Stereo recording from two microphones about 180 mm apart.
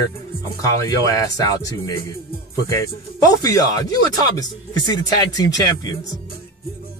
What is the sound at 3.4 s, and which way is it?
Speech, 20° left (ahead or behind).